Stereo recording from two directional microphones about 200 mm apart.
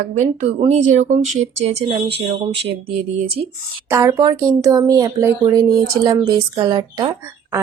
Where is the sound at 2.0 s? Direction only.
55° right (ahead or behind).